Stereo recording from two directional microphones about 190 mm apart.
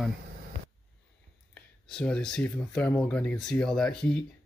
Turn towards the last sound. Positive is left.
turn(degrees=5)  # may be behind; listen again after turning